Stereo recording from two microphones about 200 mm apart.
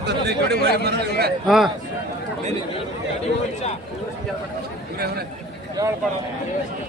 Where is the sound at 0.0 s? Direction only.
55° right (ahead or behind).